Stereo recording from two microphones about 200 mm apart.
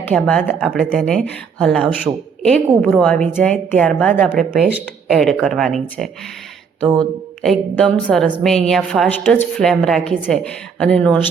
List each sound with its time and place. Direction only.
0.1 s a woman's voice: 5° left (ahead or behind)
7.0 s a woman's voice: 5° left (ahead or behind)